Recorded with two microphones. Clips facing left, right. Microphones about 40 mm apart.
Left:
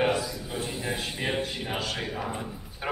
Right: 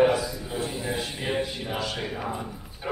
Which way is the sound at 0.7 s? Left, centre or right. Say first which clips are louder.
Right 1 dB; centre.